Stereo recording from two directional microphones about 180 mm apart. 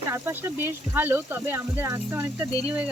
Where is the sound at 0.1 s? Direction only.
15° right (ahead or behind).